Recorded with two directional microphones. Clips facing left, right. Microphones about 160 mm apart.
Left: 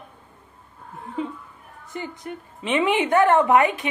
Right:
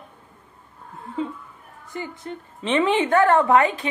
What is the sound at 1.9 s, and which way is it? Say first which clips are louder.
A woman's voice: even; 20° left (ahead or behind).